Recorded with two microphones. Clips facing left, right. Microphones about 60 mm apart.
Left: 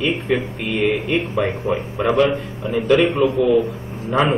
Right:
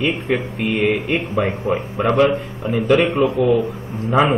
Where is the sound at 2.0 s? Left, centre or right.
Centre.